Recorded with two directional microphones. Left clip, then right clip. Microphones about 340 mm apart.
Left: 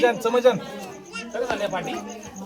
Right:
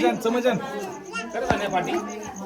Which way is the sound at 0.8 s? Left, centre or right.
Centre.